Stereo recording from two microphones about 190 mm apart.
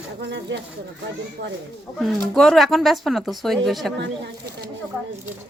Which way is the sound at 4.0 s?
65° right (ahead or behind).